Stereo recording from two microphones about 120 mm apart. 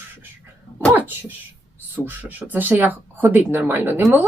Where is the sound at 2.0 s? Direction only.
15° right (ahead or behind).